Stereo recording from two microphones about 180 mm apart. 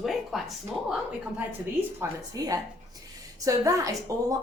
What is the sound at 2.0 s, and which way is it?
A woman's voice, 20° right (ahead or behind).